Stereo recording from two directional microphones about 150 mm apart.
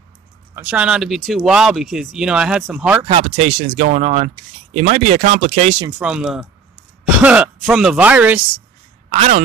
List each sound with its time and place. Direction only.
0.7 s speech: 5° right (ahead or behind)
3.1 s speech: 45° right (ahead or behind)
5.9 s speech: 5° right (ahead or behind)
9.1 s speech: 45° right (ahead or behind)